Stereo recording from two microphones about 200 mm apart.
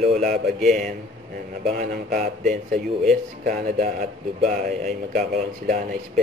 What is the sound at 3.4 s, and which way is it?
A man's voice, 40° right (ahead or behind).